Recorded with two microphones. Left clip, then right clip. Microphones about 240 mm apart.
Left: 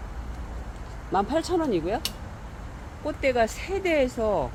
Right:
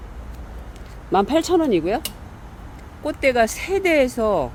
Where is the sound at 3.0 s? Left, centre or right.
Right.